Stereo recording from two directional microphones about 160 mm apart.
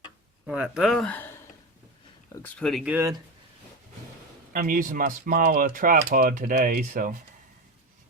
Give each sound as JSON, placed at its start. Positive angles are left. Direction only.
{"t": 0.4, "sound": "speech", "side_deg": -5}
{"t": 2.3, "sound": "speech", "side_deg": 10}
{"t": 2.9, "sound": "speech", "side_deg": -15}
{"t": 4.5, "sound": "speech", "side_deg": -60}